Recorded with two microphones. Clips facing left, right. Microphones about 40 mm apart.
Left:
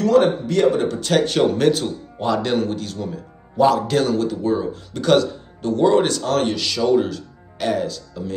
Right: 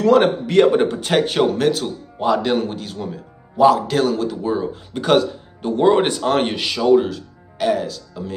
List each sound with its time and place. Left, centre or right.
0.0 s a man's voice: right
1.1 s speech: centre
1.6 s speech: centre